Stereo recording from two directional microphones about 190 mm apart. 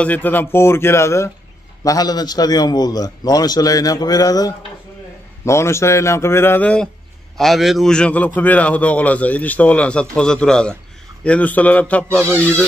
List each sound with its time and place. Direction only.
0.0 s a man's voice: 10° left (ahead or behind)